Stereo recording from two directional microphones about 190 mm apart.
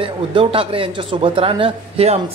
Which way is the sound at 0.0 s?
30° right (ahead or behind).